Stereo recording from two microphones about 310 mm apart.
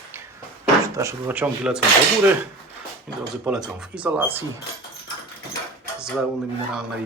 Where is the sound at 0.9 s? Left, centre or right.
Centre.